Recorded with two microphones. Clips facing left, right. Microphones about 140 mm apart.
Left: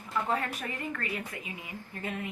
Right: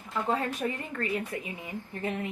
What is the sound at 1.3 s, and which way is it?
Speech, 30° right (ahead or behind).